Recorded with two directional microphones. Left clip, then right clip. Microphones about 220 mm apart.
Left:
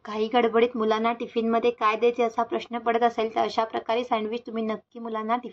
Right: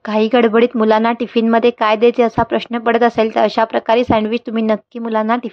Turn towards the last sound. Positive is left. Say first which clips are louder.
# right 11 dB
turn(degrees=-40)  # may be behind; listen again after turning